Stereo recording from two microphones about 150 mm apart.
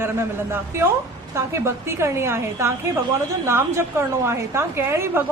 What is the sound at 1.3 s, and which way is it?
A woman's voice, 20° right (ahead or behind).